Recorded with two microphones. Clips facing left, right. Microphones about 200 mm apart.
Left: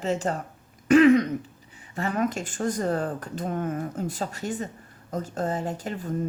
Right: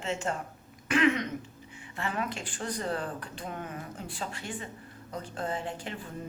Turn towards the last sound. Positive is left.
turn(degrees=40)  # may be behind; listen again after turning